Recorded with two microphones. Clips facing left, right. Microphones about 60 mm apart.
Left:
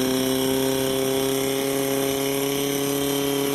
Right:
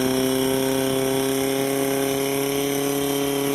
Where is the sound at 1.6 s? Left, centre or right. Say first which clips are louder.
Right 1 dB; right.